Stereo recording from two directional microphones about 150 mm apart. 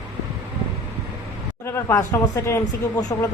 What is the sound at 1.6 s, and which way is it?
Speech, 20° left (ahead or behind).